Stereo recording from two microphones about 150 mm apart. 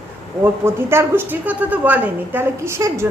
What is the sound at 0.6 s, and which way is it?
A woman's voice, 15° right (ahead or behind).